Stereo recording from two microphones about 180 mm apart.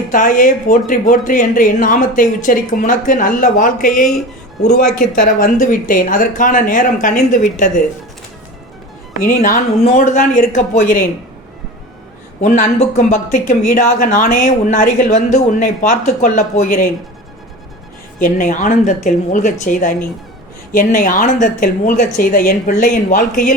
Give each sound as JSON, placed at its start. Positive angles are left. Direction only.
{"t": 0.1, "sound": "speech", "side_deg": 45}
{"t": 9.2, "sound": "speech", "side_deg": 50}
{"t": 12.4, "sound": "speech", "side_deg": 45}
{"t": 18.2, "sound": "speech", "side_deg": 50}